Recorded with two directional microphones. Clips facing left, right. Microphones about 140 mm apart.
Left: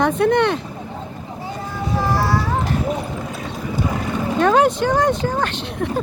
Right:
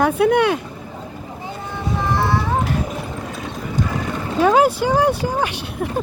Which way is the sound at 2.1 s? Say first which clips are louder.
Right 1 dB; 20° right (ahead or behind).